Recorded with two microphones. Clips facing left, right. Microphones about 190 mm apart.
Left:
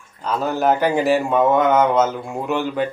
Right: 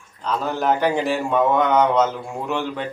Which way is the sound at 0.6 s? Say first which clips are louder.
Left 3 dB; 5° left (ahead or behind).